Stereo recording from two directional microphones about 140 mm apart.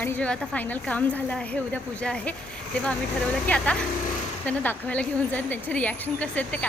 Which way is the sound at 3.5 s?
10° left (ahead or behind).